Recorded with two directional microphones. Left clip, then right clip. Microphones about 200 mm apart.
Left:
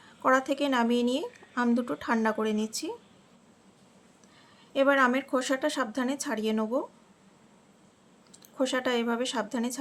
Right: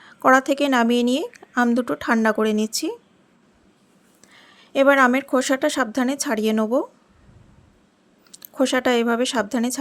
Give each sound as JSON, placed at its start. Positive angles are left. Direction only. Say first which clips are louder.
{"t": 0.0, "sound": "speech", "louder": "right 9 dB", "side_deg": -40}
{"t": 4.3, "sound": "speech", "louder": "right 10 dB", "side_deg": -40}
{"t": 8.3, "sound": "speech", "louder": "right 8 dB", "side_deg": -40}